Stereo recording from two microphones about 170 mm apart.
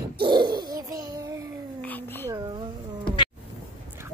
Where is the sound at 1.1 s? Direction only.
20° right (ahead or behind).